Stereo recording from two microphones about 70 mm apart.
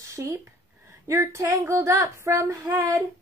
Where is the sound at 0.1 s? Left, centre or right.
Right.